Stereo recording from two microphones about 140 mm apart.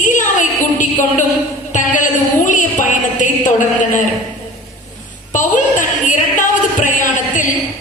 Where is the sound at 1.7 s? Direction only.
65° left (ahead or behind).